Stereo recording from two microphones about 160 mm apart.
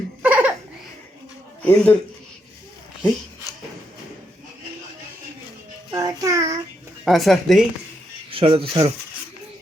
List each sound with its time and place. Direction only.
0.2 s laughter: 10° right (ahead or behind)
1.6 s speech: 10° left (ahead or behind)
5.9 s music: 20° right (ahead or behind)
7.0 s speech: centre (ahead or behind)
8.3 s speech: 35° right (ahead or behind)